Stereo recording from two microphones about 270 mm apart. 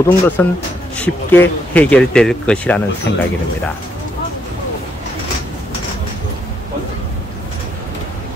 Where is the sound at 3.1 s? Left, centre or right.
Left.